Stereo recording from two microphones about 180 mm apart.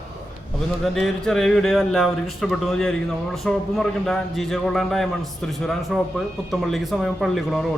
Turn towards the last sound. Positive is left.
turn(degrees=0)  # may be behind; listen again after turning